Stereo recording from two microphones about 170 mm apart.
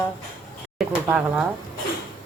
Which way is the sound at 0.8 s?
5° right (ahead or behind).